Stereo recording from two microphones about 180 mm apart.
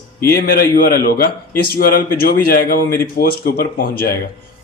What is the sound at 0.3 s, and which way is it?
Speech, 55° left (ahead or behind).